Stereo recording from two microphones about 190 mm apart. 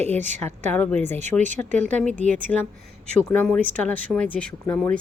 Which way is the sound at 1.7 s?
40° right (ahead or behind).